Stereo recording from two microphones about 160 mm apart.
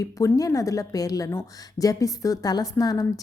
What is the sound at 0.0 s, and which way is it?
A woman's voice, 20° left (ahead or behind).